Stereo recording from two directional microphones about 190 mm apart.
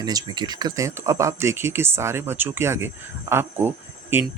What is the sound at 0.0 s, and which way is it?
Speech, 20° right (ahead or behind).